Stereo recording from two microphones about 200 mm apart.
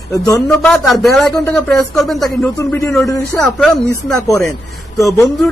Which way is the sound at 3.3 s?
Centre (ahead or behind).